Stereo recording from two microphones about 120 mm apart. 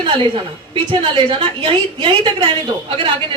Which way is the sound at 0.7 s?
45° right (ahead or behind).